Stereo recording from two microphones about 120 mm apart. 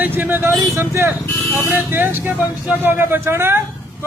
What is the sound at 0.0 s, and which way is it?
A man's voice, 15° right (ahead or behind).